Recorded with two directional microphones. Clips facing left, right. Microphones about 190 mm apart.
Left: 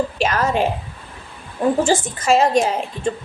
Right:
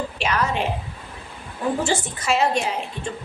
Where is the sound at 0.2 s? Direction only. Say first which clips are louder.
Left 1 dB; 45° left (ahead or behind).